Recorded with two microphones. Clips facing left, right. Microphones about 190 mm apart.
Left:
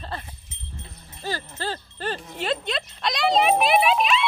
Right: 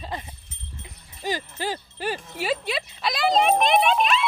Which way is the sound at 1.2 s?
15° right (ahead or behind).